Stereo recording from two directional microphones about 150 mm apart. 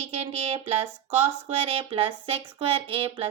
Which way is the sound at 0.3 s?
40° right (ahead or behind).